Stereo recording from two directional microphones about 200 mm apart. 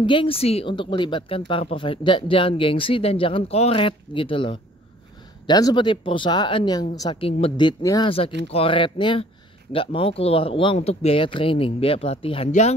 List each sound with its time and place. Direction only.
0.0 s speech: 25° left (ahead or behind)